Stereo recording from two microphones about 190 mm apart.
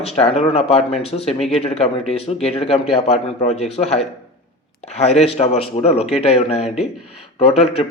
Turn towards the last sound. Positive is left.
turn(degrees=30)  # may be behind; listen again after turning